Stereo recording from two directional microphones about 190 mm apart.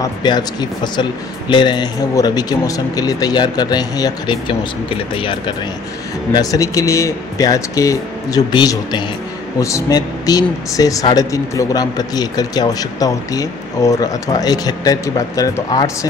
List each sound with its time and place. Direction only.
0.0 s speech: 20° left (ahead or behind)